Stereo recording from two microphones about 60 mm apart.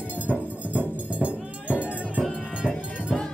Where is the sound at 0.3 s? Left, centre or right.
Right.